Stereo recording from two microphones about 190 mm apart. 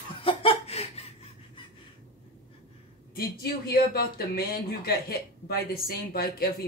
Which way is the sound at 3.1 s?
55° left (ahead or behind).